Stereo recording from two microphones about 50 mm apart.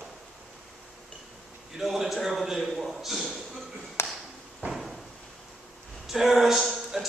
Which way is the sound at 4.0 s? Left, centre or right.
Left.